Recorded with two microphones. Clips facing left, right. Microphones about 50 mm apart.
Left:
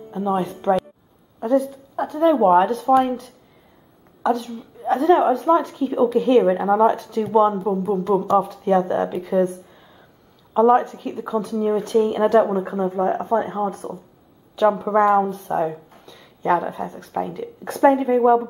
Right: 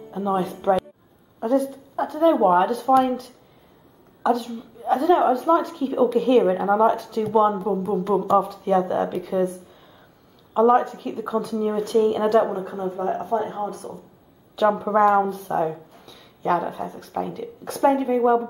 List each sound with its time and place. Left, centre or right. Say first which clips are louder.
0.1 s a woman's voice: left 1 dB; centre
10.5 s a woman's voice: left 2 dB; centre
12.5 s speech: left 5 dB; left
14.5 s a woman's voice: left 2 dB; centre
15.3 s a sound: left 1 dB; centre
16.4 s a woman's voice: left 2 dB; centre
18.0 s a woman's voice: left 3 dB; centre